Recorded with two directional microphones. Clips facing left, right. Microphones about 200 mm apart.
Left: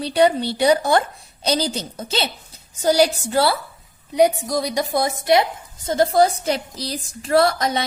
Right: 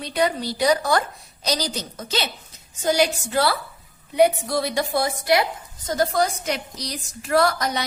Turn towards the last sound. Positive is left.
turn(degrees=25)  # may be behind; listen again after turning